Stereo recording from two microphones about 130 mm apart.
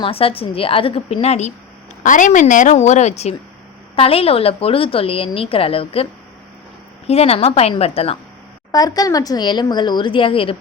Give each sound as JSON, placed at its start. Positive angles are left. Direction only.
{"t": 0.0, "sound": "a woman's voice", "side_deg": 45}
{"t": 2.0, "sound": "a woman's voice", "side_deg": 80}
{"t": 3.9, "sound": "a woman's voice", "side_deg": 50}
{"t": 7.1, "sound": "a woman's voice", "side_deg": 50}
{"t": 8.7, "sound": "speech", "side_deg": 30}